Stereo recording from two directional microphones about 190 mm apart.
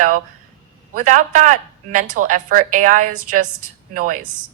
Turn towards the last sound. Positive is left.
turn(degrees=-45)  # may be behind; listen again after turning